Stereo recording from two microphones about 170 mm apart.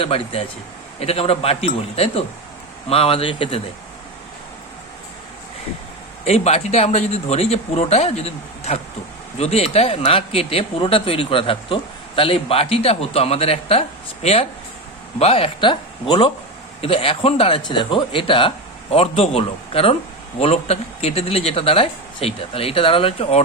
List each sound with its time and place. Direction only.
0.0 s speech: 35° left (ahead or behind)
6.2 s speech: 40° left (ahead or behind)